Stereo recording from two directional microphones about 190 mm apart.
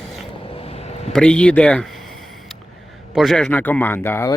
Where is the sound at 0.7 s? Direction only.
35° left (ahead or behind).